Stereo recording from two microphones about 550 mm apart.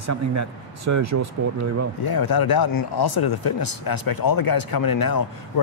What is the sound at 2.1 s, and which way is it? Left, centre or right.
Speech, left.